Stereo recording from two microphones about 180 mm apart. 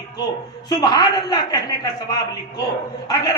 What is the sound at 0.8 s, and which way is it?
A man's voice, 20° left (ahead or behind).